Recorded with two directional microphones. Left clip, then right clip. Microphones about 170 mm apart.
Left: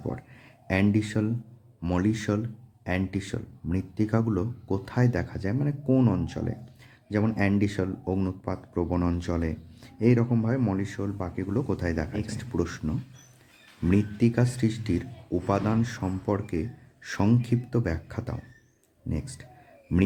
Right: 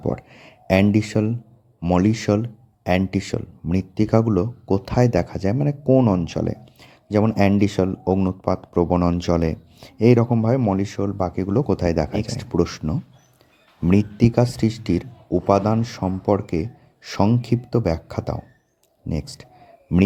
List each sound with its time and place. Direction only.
0.0 s a sound: 40° right (ahead or behind)
1.8 s speech: 35° right (ahead or behind)
5.9 s speech: 30° right (ahead or behind)